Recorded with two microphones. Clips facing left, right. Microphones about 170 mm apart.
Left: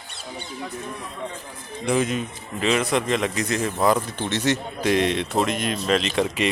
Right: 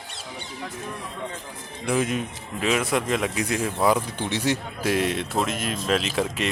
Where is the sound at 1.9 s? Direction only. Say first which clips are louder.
Left 2 dB; 5° right (ahead or behind).